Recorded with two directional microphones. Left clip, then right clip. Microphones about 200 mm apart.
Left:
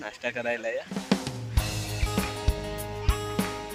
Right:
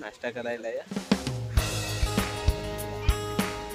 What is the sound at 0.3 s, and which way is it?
Speech, 5° left (ahead or behind).